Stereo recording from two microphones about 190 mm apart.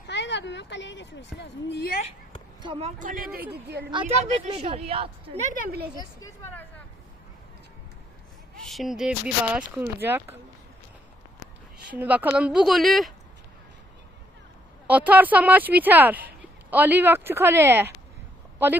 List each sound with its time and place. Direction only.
0.1 s a sound: 65° left (ahead or behind)
2.6 s speech: 30° right (ahead or behind)
3.0 s speech: 45° right (ahead or behind)
3.5 s a woman's voice: 60° right (ahead or behind)
3.9 s a woman's voice: 35° right (ahead or behind); by 5.9 s 50° right (ahead or behind)
6.2 s speech: 10° left (ahead or behind)
8.5 s speech: centre (ahead or behind)
11.9 s speech: 10° right (ahead or behind)
14.8 s speech: 10° right (ahead or behind)